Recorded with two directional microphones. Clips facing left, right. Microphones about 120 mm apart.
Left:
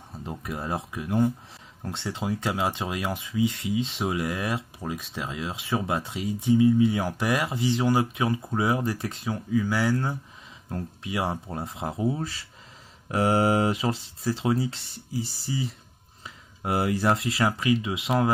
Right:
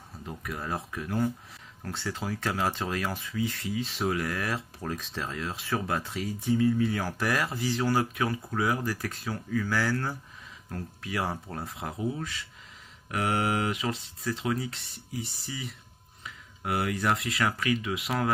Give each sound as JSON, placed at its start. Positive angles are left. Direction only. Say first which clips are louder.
{"t": 0.2, "sound": "speech", "louder": "left 3 dB", "side_deg": 25}